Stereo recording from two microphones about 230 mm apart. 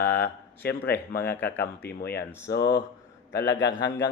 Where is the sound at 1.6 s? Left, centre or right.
Left.